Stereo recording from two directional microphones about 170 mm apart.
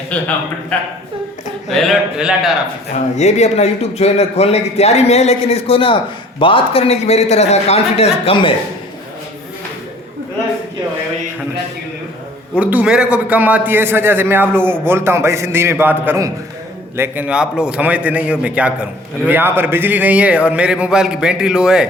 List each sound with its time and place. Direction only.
1.7 s speech: centre (ahead or behind)
2.9 s a man's voice: 40° left (ahead or behind)
12.5 s a man's voice: 5° right (ahead or behind)